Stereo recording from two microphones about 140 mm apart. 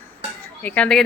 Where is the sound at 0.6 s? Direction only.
10° left (ahead or behind).